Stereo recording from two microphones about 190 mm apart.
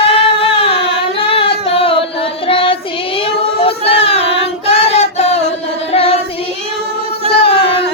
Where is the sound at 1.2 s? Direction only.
30° left (ahead or behind).